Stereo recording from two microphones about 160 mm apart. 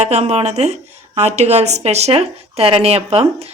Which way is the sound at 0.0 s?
40° right (ahead or behind).